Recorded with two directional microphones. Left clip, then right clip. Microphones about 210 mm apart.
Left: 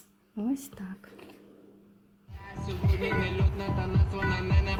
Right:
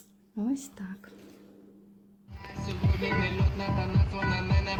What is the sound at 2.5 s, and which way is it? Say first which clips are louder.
Music: even; 40° right (ahead or behind).